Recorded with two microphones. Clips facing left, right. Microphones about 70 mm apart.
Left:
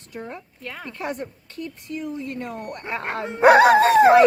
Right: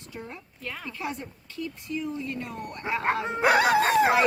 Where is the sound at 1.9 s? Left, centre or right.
Left.